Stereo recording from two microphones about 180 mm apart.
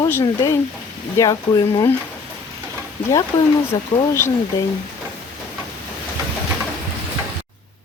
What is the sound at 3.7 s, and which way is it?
Speech, 20° left (ahead or behind).